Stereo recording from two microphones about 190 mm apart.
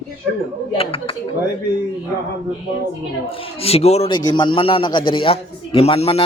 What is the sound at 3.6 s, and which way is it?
A man's voice, 35° left (ahead or behind).